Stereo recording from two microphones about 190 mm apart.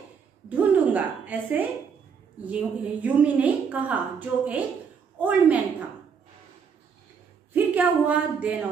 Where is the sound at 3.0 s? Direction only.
10° right (ahead or behind).